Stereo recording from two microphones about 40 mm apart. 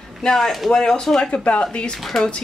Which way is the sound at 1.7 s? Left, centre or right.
Left.